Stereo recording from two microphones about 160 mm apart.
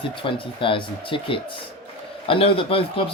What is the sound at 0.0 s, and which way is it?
A man's voice, 35° left (ahead or behind).